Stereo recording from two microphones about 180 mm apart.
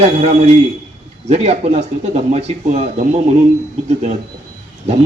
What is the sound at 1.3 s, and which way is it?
Speech, 35° right (ahead or behind).